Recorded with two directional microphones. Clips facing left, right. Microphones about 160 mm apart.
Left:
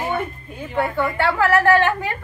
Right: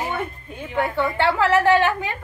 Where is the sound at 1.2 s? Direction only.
25° right (ahead or behind).